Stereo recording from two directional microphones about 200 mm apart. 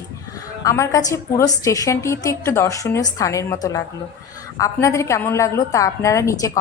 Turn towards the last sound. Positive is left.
turn(degrees=15)  # may be behind; listen again after turning